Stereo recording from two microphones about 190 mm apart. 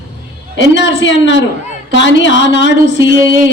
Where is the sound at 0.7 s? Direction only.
70° left (ahead or behind).